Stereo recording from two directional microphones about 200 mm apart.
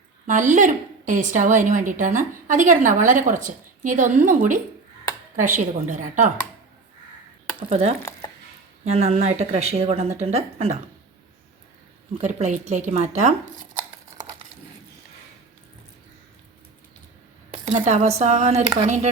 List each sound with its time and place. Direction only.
0.3 s a woman's voice: 40° right (ahead or behind)
7.6 s a woman's voice: 30° right (ahead or behind)
12.1 s a woman's voice: 35° right (ahead or behind)
17.7 s a woman's voice: 35° right (ahead or behind)